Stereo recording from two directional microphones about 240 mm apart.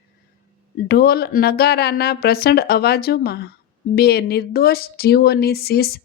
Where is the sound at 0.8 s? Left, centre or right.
Left.